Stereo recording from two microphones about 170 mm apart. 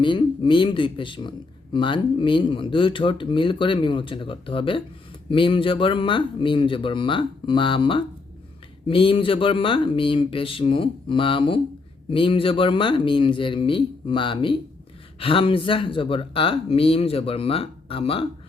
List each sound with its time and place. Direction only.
0.0 s speech: 30° left (ahead or behind)